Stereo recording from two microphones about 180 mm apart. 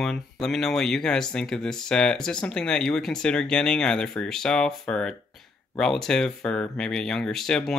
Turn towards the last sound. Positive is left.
turn(degrees=5)  # may be behind; listen again after turning